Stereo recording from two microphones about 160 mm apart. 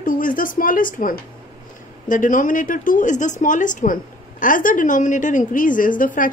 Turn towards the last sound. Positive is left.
turn(degrees=55)  # may be behind; listen again after turning